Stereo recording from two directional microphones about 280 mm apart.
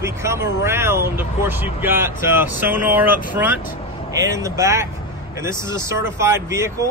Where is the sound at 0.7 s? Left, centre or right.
Centre.